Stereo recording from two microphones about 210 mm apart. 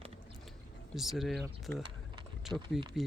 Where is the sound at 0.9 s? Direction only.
Centre (ahead or behind).